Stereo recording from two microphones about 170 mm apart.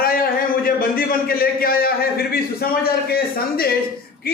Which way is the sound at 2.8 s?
65° left (ahead or behind).